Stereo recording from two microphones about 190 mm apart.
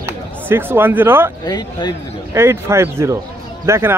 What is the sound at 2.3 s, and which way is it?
A man's voice, 15° right (ahead or behind).